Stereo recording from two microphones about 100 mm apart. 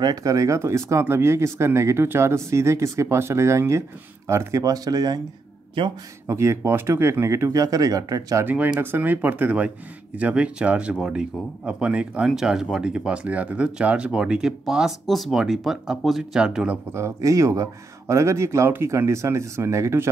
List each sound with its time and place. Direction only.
0.0 s speech: 40° right (ahead or behind)
6.2 s speech: 30° right (ahead or behind)
8.5 s speech: 20° right (ahead or behind)
16.9 s speech: 30° right (ahead or behind)